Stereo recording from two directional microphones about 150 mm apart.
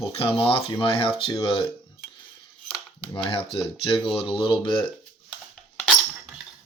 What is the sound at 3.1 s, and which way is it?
Speech, 30° left (ahead or behind).